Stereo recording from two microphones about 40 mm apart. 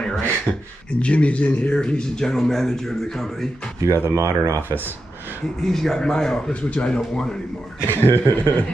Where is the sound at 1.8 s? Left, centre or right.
Centre.